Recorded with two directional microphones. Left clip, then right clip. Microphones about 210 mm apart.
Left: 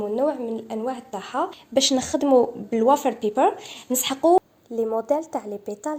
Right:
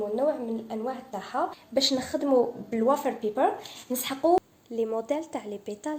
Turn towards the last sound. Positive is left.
turn(degrees=10)  # may be behind; listen again after turning